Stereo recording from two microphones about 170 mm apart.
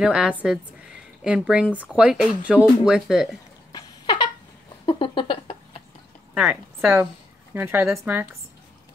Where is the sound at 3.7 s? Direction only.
20° left (ahead or behind).